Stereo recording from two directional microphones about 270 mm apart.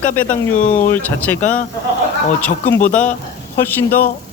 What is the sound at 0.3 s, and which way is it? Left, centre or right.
Speech, left.